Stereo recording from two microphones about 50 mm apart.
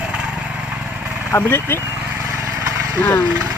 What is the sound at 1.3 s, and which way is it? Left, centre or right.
Speech, left.